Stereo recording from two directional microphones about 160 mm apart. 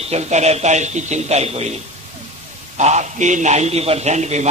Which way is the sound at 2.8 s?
45° right (ahead or behind).